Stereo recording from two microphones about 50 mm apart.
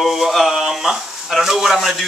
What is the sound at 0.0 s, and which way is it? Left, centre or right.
Speech, centre.